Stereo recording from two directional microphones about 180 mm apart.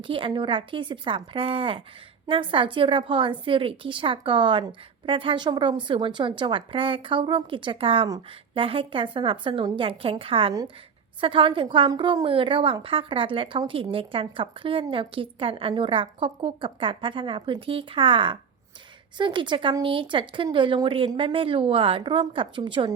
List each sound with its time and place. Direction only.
0.0 s a woman's voice: 30° right (ahead or behind)